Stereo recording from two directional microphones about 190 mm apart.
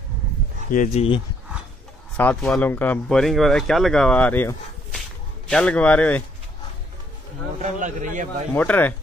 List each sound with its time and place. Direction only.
0.7 s speech: 45° left (ahead or behind)
2.1 s a man's voice: 5° left (ahead or behind)
7.6 s a man's voice: 40° right (ahead or behind)
8.5 s a man's voice: 10° left (ahead or behind)